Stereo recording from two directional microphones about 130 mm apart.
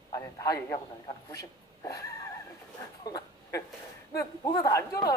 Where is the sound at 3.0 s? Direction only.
30° left (ahead or behind).